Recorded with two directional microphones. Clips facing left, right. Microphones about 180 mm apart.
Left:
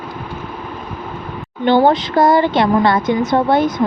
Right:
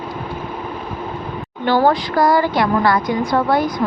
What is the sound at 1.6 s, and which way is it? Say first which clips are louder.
Speech: left 3 dB; 20° left (ahead or behind).